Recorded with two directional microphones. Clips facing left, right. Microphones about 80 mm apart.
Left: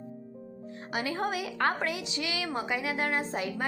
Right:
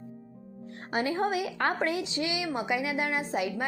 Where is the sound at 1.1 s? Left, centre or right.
Right.